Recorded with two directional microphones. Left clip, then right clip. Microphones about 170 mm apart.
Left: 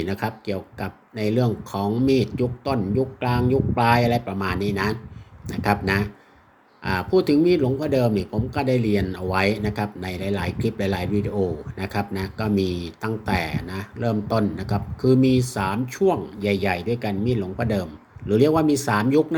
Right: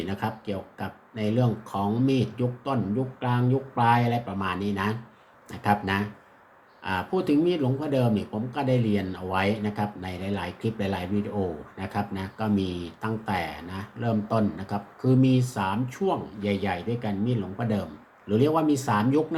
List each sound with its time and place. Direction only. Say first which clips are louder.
0.0 s speech: left 4 dB; 40° left (ahead or behind)